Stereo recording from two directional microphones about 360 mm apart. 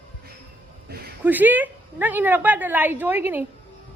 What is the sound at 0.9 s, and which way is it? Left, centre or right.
Speech, right.